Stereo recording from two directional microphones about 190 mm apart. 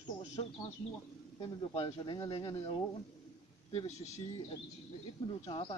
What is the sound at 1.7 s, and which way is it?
Speech, 30° left (ahead or behind).